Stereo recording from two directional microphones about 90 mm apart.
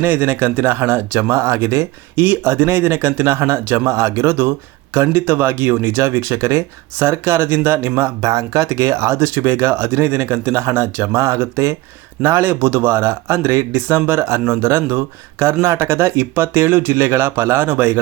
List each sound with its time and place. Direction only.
0.0 s speech: 20° right (ahead or behind)
8.2 s speech: 40° right (ahead or behind); by 18.0 s 25° right (ahead or behind)